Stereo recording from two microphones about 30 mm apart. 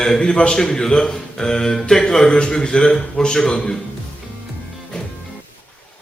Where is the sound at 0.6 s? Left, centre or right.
Centre.